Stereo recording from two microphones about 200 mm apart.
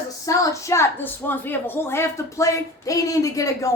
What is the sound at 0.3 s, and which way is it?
A woman's voice, 15° left (ahead or behind).